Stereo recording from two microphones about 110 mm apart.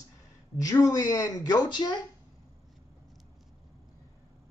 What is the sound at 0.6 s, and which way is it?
Speech, 35° left (ahead or behind).